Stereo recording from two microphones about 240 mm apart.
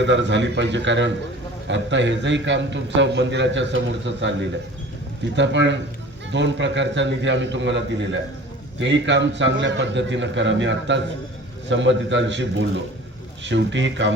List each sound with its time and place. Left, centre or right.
0.0 s a man's voice: right